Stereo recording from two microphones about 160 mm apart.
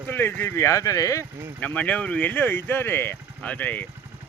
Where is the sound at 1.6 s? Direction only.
10° left (ahead or behind).